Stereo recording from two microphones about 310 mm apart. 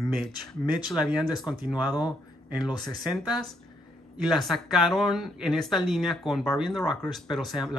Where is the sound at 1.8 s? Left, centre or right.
Centre.